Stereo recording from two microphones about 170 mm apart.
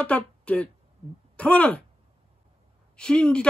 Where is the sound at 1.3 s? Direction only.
5° left (ahead or behind).